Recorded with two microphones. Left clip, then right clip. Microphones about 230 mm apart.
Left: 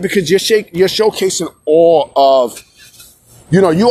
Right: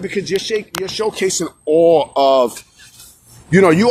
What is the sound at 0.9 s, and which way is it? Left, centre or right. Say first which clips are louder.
Speech: left 4 dB; left.